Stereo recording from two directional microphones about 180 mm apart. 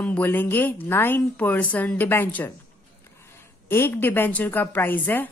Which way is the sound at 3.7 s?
10° left (ahead or behind).